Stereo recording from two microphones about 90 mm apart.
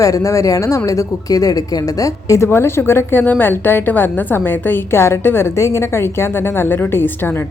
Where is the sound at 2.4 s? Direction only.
25° left (ahead or behind).